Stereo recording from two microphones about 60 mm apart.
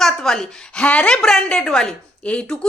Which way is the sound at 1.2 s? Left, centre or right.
Centre.